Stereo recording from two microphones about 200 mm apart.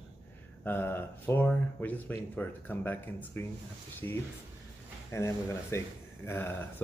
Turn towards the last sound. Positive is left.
turn(degrees=10)  # may be behind; listen again after turning